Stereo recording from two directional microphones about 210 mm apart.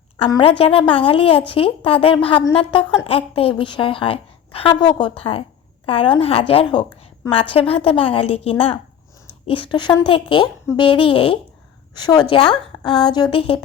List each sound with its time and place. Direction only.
0.2 s a woman's voice: 25° left (ahead or behind)